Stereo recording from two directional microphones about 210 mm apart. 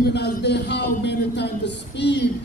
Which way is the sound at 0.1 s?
55° left (ahead or behind).